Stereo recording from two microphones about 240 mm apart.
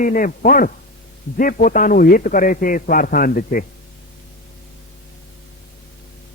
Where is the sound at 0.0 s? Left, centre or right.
Left.